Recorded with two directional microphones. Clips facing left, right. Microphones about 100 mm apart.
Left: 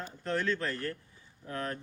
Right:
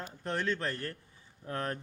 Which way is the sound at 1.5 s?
35° right (ahead or behind).